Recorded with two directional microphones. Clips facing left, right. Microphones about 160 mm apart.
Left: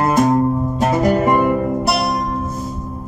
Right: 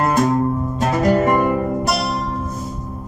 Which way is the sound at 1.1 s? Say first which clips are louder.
Left 1 dB; 20° left (ahead or behind).